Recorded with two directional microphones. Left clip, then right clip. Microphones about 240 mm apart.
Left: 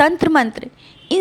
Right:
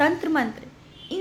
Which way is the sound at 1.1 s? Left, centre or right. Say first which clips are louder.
Left 12 dB; left.